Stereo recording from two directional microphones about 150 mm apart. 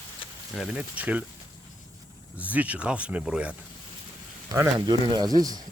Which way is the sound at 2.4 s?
10° right (ahead or behind).